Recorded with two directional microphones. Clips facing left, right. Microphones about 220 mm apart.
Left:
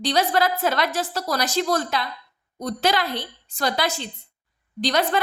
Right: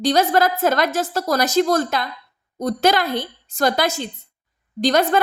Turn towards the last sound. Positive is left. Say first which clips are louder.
# right 5 dB
turn(degrees=-45)  # may be behind; listen again after turning